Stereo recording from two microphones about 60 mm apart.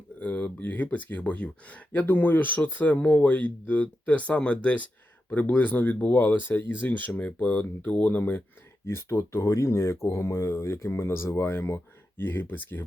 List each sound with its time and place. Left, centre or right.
0.2 s speech: left
8.9 s speech: left